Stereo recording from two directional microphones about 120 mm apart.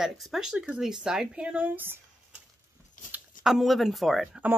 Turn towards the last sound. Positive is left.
turn(degrees=-5)  # may be behind; listen again after turning